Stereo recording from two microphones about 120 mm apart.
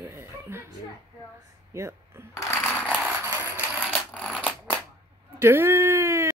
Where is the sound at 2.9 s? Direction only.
10° right (ahead or behind).